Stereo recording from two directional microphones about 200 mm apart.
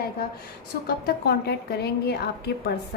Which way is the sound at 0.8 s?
55° left (ahead or behind).